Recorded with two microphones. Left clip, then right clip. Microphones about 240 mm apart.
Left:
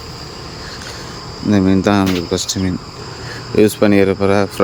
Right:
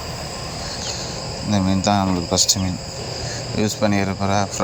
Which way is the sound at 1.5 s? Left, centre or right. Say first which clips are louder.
Left 6 dB; centre.